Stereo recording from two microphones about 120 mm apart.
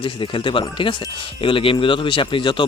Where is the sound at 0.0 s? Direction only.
45° left (ahead or behind).